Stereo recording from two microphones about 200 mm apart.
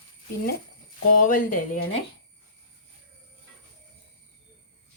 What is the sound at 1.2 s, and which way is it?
Speech, 40° left (ahead or behind).